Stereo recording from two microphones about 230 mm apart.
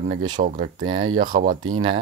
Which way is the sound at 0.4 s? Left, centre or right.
Right.